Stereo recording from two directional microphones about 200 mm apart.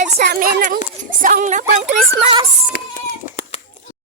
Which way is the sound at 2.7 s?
45° left (ahead or behind).